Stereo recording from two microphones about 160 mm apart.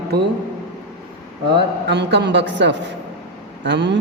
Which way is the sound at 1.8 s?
90° right.